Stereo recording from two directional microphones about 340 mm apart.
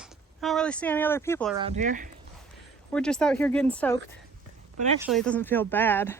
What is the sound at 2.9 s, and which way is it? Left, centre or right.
Speech, centre.